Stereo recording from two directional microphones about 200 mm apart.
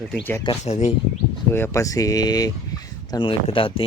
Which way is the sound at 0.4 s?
35° left (ahead or behind).